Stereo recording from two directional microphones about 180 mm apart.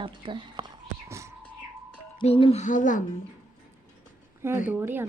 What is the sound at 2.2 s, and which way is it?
Speech, 35° left (ahead or behind).